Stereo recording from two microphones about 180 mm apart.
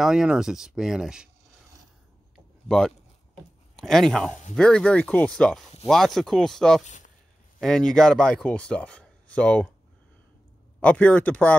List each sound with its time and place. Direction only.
0.0 s speech: 5° right (ahead or behind)
3.7 s speech: centre (ahead or behind)
6.8 s speech: 40° left (ahead or behind)
7.6 s speech: 5° left (ahead or behind)
10.8 s speech: 10° left (ahead or behind)